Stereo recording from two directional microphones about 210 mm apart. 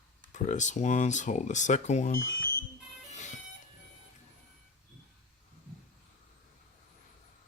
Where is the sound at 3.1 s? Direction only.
35° left (ahead or behind).